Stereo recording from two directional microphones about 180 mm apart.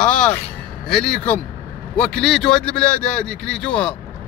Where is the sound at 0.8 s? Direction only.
5° left (ahead or behind).